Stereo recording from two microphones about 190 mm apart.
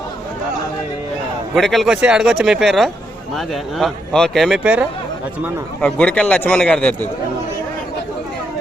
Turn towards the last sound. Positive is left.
turn(degrees=5)  # may be behind; listen again after turning